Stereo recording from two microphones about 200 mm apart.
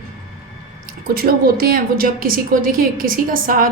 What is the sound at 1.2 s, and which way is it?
A woman's voice, 50° right (ahead or behind).